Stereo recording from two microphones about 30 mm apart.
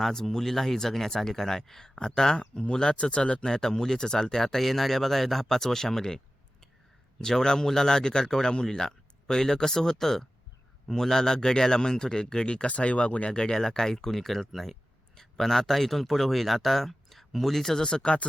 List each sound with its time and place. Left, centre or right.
0.0 s speech: centre; by 3.4 s left
3.4 s speech: left
7.4 s speech: left
12.5 s speech: left
13.3 s speech: left; by 17.7 s centre
17.7 s speech: left